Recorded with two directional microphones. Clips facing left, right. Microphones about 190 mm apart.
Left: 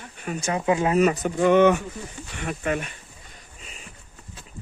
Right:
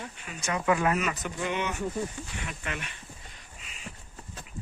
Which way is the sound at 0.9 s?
40° left (ahead or behind).